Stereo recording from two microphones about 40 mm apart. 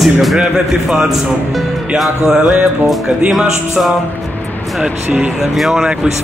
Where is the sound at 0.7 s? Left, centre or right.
Centre.